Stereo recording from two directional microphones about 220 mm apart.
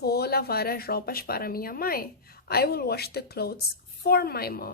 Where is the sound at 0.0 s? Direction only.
45° left (ahead or behind).